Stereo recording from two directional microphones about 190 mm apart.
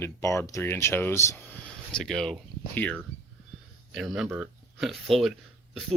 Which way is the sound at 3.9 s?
Centre (ahead or behind).